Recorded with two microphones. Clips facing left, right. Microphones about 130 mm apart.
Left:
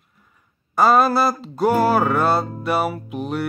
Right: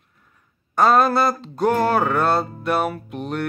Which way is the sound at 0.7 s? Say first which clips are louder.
Left 1 dB; 5° left (ahead or behind).